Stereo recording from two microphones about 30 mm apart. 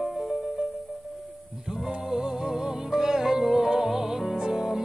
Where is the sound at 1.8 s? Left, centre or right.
Centre.